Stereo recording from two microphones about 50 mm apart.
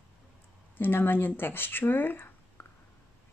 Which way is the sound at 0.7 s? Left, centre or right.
Left.